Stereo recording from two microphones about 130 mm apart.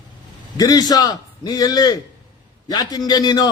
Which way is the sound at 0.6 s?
30° left (ahead or behind).